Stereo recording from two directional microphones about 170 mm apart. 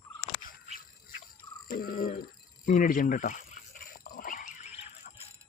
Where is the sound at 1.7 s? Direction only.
55° left (ahead or behind); by 4.8 s 40° left (ahead or behind).